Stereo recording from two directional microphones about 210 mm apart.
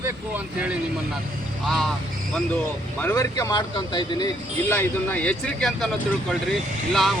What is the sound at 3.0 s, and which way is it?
Speech, 10° left (ahead or behind).